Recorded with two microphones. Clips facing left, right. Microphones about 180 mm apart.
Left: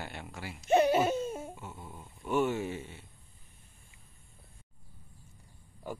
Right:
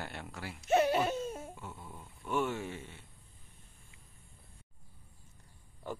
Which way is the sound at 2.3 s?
5° left (ahead or behind).